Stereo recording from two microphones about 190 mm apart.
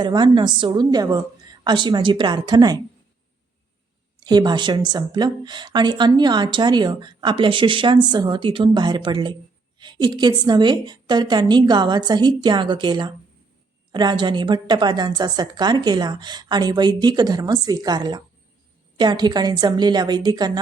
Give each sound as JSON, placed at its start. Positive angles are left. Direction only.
{"t": 0.0, "sound": "speech", "side_deg": -25}
{"t": 4.2, "sound": "speech", "side_deg": -20}